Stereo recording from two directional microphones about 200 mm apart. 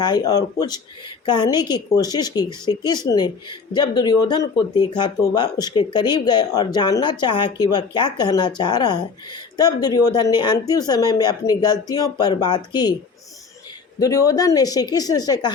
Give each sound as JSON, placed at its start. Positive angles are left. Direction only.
{"t": 0.0, "sound": "speech", "side_deg": 20}
{"t": 14.0, "sound": "speech", "side_deg": 15}